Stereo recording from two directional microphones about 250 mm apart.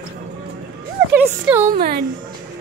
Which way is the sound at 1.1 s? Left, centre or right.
Centre.